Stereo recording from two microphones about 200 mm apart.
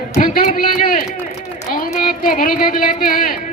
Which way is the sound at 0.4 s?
40° left (ahead or behind).